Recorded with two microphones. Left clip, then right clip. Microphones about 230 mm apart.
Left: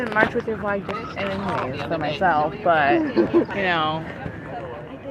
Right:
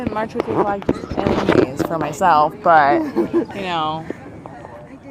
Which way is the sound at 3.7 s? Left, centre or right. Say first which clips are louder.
Even; right.